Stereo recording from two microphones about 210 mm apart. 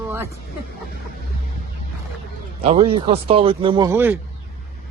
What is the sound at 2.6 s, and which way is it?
Speech, 30° right (ahead or behind).